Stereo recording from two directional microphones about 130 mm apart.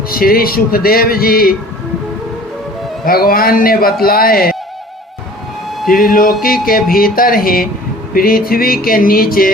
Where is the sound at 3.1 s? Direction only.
90° left.